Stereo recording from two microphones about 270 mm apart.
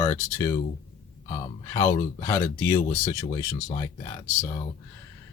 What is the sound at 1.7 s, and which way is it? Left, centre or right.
Speech, centre.